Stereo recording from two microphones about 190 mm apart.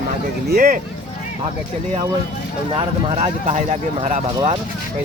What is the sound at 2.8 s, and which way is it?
Speech, 35° right (ahead or behind).